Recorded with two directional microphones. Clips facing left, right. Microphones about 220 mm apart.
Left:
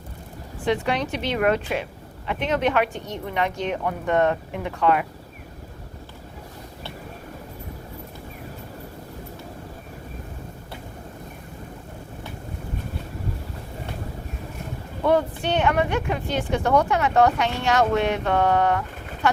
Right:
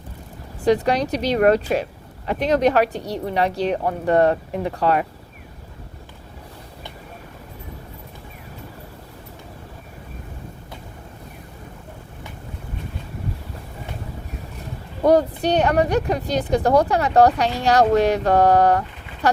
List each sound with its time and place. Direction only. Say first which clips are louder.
0.6 s speech: right 5 dB; 40° right (ahead or behind)
15.0 s speech: right 5 dB; 40° right (ahead or behind)